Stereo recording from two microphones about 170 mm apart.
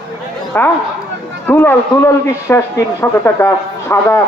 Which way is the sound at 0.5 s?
10° left (ahead or behind).